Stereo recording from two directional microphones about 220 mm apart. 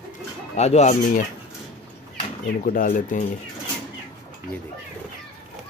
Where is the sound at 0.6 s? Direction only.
30° left (ahead or behind).